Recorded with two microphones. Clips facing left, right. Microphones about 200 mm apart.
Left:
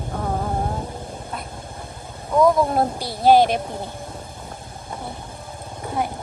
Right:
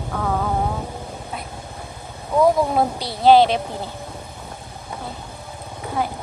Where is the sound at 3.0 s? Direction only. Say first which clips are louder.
Right 2 dB; 50° left (ahead or behind).